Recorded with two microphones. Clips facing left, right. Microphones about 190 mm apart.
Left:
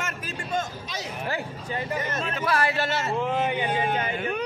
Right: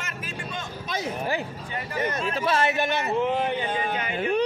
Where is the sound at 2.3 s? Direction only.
25° right (ahead or behind).